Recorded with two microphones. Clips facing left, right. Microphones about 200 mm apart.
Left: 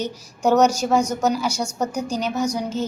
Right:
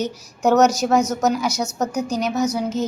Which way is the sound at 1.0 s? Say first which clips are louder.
Right 1 dB; 10° left (ahead or behind).